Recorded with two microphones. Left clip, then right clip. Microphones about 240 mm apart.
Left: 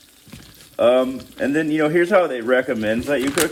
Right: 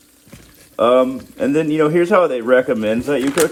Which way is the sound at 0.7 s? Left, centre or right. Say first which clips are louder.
Right 3 dB; centre.